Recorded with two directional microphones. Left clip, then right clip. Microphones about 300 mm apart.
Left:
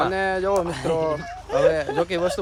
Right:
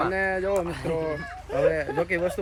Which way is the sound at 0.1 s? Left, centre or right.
Centre.